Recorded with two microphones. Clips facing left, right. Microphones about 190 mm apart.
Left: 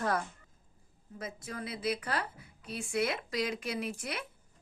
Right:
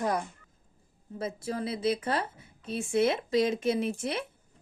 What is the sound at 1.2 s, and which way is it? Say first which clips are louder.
A woman's voice: right 8 dB; 30° right (ahead or behind).